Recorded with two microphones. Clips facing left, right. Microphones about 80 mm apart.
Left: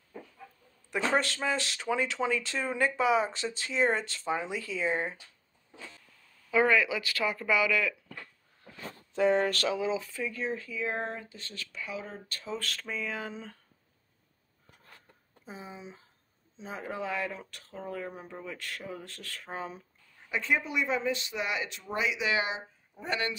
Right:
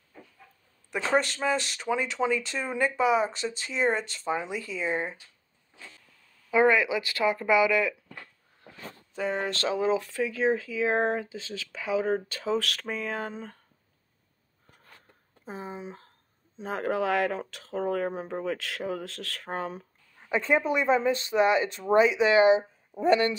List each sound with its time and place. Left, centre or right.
0.9 s speech: centre
6.5 s speech: right
9.1 s speech: centre
9.5 s speech: right
9.9 s speech: right
12.4 s a sound: right
12.8 s a sound: right
15.4 s speech: right
16.5 s speech: right
19.4 s speech: right
20.2 s speech: right